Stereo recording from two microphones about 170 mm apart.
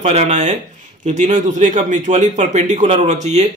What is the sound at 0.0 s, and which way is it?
Speech, 40° right (ahead or behind).